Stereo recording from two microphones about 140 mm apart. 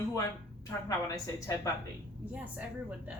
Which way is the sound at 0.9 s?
25° left (ahead or behind).